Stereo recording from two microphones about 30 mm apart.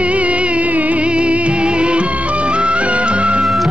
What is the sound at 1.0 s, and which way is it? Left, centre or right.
Music, right.